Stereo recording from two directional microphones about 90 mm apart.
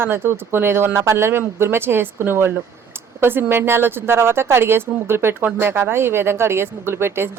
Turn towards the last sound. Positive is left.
turn(degrees=-25)  # may be behind; listen again after turning